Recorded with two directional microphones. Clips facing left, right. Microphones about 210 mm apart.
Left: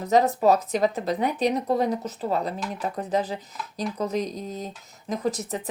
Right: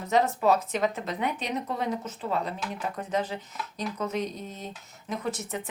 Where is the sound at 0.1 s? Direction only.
35° left (ahead or behind).